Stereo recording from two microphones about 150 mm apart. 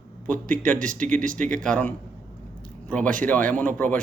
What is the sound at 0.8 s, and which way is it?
Speech, 60° right (ahead or behind).